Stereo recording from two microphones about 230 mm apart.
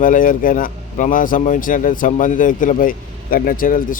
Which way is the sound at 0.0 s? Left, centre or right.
Left.